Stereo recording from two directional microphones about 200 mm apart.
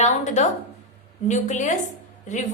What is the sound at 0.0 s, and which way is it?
A woman's voice, 35° left (ahead or behind).